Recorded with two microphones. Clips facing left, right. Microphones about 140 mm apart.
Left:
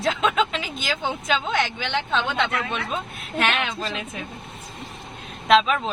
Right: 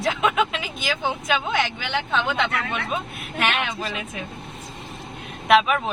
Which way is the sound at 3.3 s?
10° right (ahead or behind).